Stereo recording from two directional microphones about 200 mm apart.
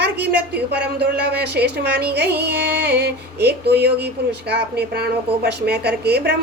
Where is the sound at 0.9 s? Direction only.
55° right (ahead or behind).